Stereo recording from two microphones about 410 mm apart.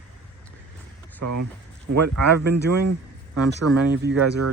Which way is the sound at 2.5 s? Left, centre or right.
Right.